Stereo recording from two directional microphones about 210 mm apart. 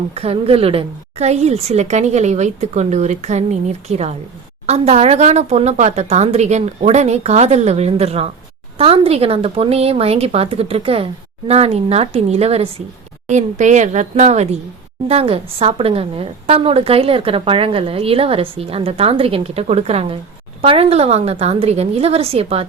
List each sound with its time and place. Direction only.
0.1 s a woman's voice: 30° right (ahead or behind)